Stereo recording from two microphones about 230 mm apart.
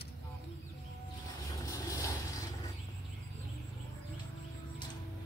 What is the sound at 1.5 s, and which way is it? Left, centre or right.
Mechanisms, centre.